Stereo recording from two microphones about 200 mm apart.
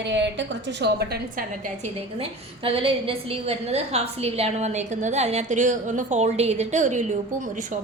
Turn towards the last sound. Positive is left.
turn(degrees=-40)  # may be behind; listen again after turning